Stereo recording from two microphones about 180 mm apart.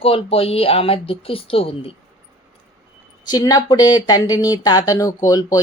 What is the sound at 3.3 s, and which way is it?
Speech, 20° left (ahead or behind).